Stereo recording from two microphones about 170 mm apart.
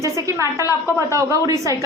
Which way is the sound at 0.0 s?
20° right (ahead or behind).